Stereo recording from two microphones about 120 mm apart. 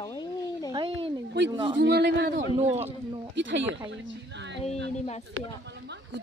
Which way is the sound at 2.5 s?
55° right (ahead or behind).